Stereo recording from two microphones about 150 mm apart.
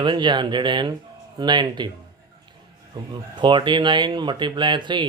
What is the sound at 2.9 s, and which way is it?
Speech, 30° right (ahead or behind).